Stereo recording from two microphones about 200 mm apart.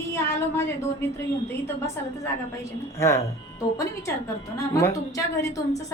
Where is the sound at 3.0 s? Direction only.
15° left (ahead or behind).